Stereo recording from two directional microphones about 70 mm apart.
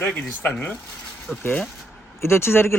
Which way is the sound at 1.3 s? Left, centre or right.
Left.